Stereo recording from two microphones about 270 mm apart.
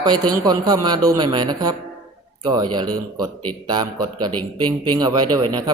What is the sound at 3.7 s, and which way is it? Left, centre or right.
Speech, centre.